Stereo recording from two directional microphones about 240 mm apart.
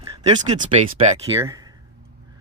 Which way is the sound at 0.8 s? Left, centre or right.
Right.